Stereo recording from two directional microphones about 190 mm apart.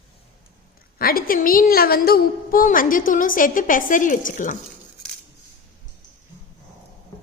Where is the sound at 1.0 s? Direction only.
50° left (ahead or behind).